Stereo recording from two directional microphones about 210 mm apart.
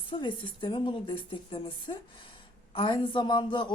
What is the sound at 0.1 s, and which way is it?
A woman's voice, 25° left (ahead or behind).